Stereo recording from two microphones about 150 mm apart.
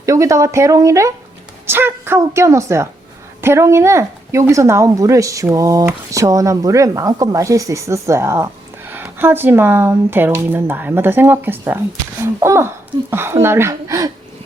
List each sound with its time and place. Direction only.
0.0 s speech: 20° right (ahead or behind)